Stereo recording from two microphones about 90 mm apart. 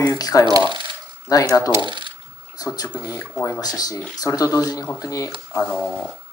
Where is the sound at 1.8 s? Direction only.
60° right (ahead or behind).